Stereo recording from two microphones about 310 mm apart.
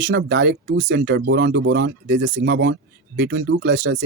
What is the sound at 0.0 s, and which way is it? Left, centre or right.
Speech, right.